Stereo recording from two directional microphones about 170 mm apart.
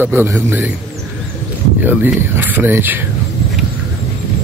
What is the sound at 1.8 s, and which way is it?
Speech, 10° right (ahead or behind).